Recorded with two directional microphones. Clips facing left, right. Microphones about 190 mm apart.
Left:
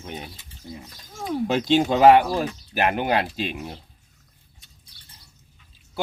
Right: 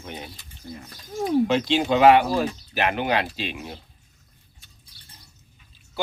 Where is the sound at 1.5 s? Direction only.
40° left (ahead or behind).